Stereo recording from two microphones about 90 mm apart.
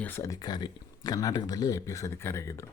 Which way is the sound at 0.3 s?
50° left (ahead or behind).